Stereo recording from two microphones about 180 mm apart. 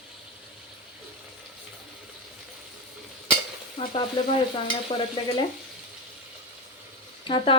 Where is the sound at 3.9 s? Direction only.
30° left (ahead or behind).